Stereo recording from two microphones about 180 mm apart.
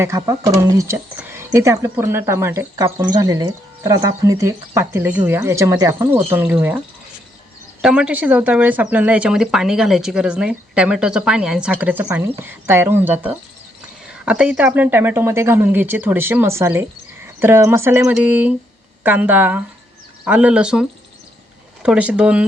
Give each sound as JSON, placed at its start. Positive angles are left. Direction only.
{"t": 0.0, "sound": "speech", "side_deg": -15}
{"t": 21.8, "sound": "speech", "side_deg": -5}